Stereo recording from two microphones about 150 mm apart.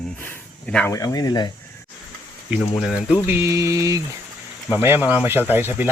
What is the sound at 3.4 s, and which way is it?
Mantra, 20° right (ahead or behind).